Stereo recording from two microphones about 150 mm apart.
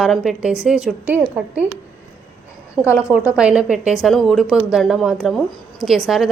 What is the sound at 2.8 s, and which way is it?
Speech, 20° left (ahead or behind).